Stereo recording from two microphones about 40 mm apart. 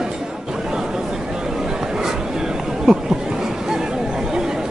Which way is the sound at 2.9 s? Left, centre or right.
Centre.